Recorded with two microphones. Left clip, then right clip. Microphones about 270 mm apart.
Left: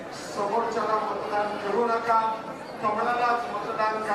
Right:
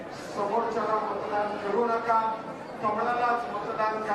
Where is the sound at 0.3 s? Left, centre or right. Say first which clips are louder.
Left 1 dB; centre.